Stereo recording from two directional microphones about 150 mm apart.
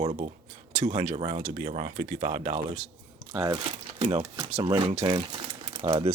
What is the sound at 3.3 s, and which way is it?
Speech, 25° right (ahead or behind).